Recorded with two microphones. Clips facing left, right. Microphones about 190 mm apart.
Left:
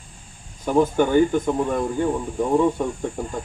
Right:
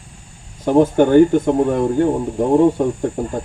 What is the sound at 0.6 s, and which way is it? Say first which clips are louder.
A man's voice: right 6 dB; 70° right (ahead or behind).